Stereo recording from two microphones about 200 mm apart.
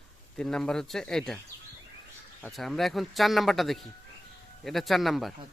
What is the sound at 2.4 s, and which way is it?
Speech, centre (ahead or behind).